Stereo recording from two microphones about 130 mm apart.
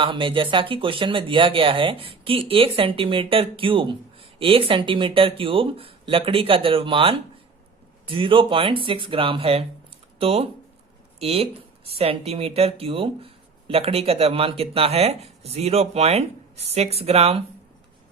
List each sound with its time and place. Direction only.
0.0 s speech: 40° right (ahead or behind)